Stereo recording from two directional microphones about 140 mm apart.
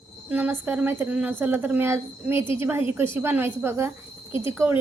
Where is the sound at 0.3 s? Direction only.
10° right (ahead or behind).